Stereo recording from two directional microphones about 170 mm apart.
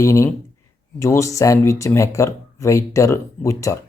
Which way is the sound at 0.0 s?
15° left (ahead or behind).